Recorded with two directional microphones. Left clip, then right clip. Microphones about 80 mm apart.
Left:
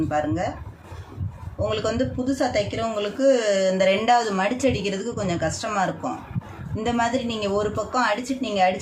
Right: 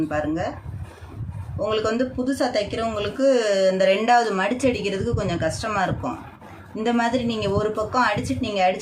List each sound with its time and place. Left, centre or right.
0.1 s speech: right
1.5 s speech: right